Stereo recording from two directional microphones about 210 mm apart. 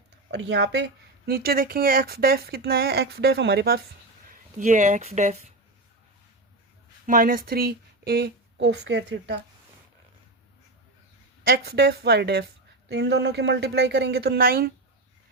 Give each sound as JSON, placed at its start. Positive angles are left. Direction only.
{"t": 0.3, "sound": "speech", "side_deg": -55}
{"t": 1.3, "sound": "speech", "side_deg": -45}
{"t": 4.3, "sound": "speech", "side_deg": -35}
{"t": 7.1, "sound": "speech", "side_deg": -40}
{"t": 11.4, "sound": "speech", "side_deg": -50}